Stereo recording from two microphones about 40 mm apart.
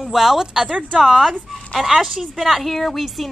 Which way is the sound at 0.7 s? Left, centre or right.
Right.